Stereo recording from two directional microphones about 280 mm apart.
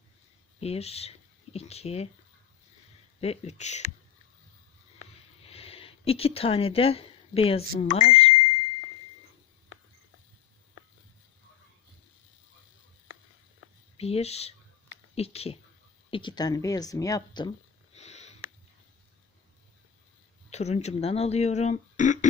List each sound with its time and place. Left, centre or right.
0.6 s speech: left
3.2 s speech: left
5.5 s speech: left
14.0 s speech: left
17.9 s sniff: left
20.5 s speech: left